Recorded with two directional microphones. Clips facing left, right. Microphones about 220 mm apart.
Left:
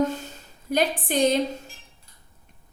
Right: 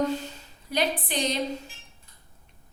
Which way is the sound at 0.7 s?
50° left (ahead or behind).